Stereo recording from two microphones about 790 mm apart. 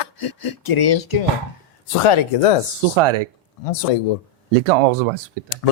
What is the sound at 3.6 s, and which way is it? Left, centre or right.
Speech, left.